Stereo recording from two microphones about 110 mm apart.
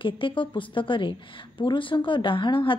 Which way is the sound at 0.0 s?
50° left (ahead or behind).